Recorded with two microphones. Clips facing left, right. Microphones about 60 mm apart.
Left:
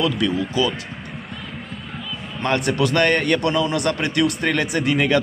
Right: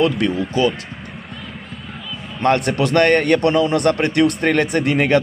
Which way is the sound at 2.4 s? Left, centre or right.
Right.